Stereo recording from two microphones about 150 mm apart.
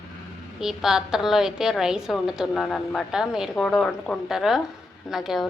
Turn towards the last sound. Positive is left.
turn(degrees=0)  # may be behind; listen again after turning